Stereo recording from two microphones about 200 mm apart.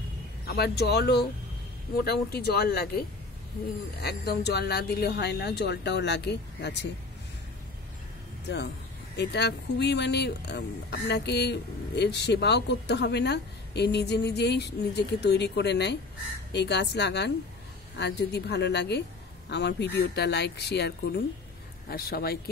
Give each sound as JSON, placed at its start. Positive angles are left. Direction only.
{"t": 0.5, "sound": "speech", "side_deg": 55}
{"t": 9.1, "sound": "speech", "side_deg": 55}